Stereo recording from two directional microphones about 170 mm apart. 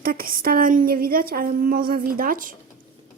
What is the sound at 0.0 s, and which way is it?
Speech, 60° right (ahead or behind).